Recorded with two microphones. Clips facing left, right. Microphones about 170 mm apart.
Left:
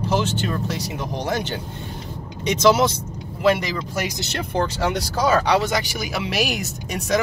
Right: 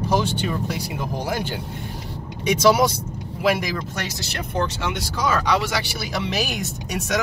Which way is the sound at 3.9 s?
15° left (ahead or behind).